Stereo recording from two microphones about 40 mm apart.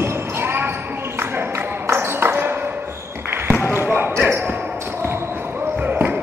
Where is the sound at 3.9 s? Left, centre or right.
Right.